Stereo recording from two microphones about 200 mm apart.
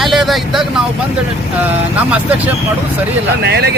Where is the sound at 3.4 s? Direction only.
55° right (ahead or behind).